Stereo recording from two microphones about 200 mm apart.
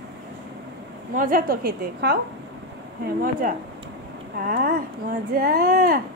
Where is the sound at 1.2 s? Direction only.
45° right (ahead or behind).